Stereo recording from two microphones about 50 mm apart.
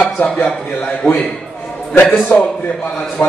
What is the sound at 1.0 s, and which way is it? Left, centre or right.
Speech, left.